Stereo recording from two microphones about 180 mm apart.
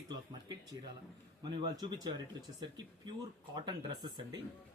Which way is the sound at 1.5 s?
25° right (ahead or behind).